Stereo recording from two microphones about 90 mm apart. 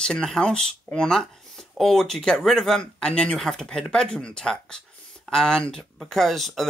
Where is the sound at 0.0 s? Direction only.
10° left (ahead or behind).